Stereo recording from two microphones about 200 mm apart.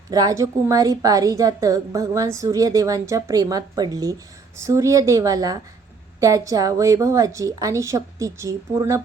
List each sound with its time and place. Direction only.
0.1 s a woman's voice: 20° right (ahead or behind)